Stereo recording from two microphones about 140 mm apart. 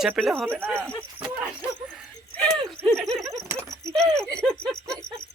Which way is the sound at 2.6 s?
5° left (ahead or behind).